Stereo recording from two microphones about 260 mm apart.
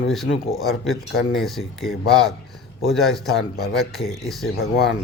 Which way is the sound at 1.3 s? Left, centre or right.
Centre.